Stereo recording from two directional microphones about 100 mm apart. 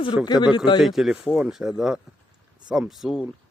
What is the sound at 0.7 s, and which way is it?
Speech, 5° right (ahead or behind).